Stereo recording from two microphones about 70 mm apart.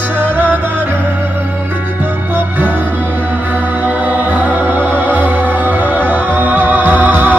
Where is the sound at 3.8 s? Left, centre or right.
Right.